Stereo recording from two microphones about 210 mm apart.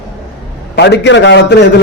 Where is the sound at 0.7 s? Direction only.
55° left (ahead or behind).